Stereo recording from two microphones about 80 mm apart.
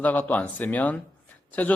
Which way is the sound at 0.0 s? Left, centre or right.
Left.